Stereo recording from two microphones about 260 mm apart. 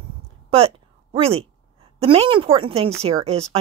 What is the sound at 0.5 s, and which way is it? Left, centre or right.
A woman's voice, right.